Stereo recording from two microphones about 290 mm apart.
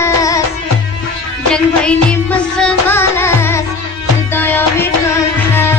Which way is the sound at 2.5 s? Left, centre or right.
Centre.